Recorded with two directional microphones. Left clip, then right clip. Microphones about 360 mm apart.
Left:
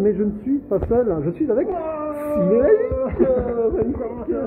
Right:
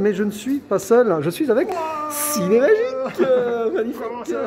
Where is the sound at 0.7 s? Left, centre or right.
Right.